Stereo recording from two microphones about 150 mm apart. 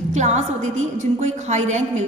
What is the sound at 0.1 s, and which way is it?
A woman's voice, 50° right (ahead or behind).